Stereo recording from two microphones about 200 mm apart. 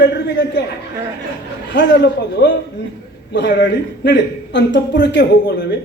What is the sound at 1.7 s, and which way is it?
A man's voice, 60° left (ahead or behind).